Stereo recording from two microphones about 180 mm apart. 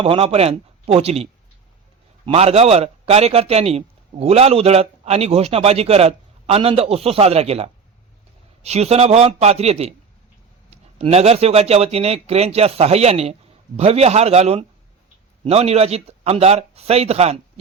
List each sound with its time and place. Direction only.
0.0 s a man's voice: 30° right (ahead or behind)